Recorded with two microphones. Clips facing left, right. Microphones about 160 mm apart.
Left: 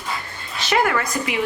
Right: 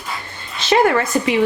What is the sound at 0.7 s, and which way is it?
Speech, 30° right (ahead or behind).